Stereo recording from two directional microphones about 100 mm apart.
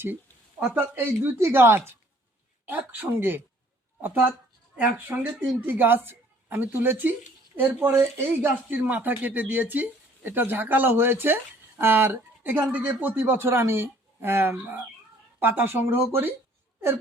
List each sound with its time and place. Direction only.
0.7 s speech: 20° right (ahead or behind)